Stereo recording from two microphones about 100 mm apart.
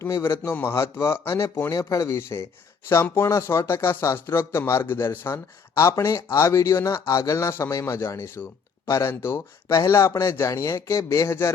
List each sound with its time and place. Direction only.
0.0 s speech: 25° left (ahead or behind)